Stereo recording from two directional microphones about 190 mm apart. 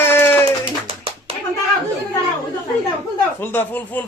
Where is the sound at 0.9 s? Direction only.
30° right (ahead or behind).